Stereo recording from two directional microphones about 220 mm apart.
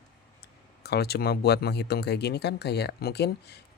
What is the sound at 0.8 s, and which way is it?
Speech, 45° left (ahead or behind).